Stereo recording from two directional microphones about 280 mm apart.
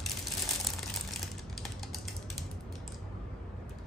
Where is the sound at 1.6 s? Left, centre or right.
Centre.